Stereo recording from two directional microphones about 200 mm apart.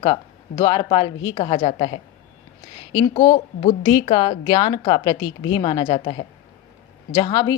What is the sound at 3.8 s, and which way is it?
Speech, 25° left (ahead or behind).